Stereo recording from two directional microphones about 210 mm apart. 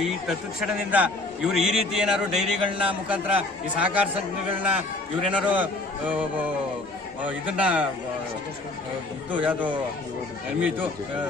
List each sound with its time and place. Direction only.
0.0 s a man's voice: centre (ahead or behind)
7.2 s a man's voice: 5° right (ahead or behind)
9.3 s a man's voice: 10° right (ahead or behind)